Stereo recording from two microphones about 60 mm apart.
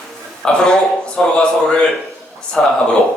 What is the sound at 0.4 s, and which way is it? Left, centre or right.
A man's voice, centre.